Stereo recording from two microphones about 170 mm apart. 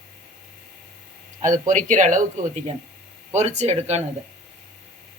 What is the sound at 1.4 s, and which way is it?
Speech, 50° right (ahead or behind).